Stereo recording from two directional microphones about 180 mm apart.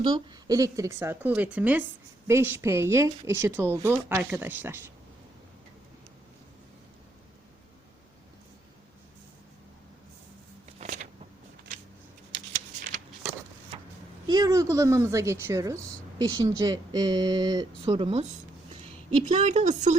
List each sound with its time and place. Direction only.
0.0 s speech: 25° right (ahead or behind)
10.8 s a sound: 45° right (ahead or behind)
14.3 s a woman's voice: 20° right (ahead or behind); by 20.0 s 40° right (ahead or behind)